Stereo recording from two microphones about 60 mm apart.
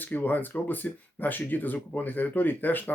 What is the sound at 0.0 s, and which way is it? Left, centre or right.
Speech, left.